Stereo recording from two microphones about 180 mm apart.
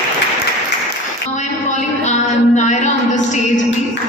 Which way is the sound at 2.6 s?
40° left (ahead or behind).